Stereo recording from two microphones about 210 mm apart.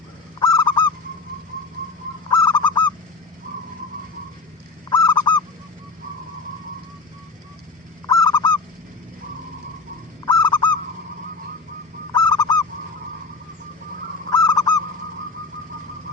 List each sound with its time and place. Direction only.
0.3 s goose: 20° left (ahead or behind)
2.3 s goose: 20° left (ahead or behind)
4.9 s goose: 20° left (ahead or behind)
8.0 s goose: 15° left (ahead or behind)
10.2 s honk: 20° left (ahead or behind)
12.1 s goose: 20° left (ahead or behind)
14.3 s honk: 20° left (ahead or behind)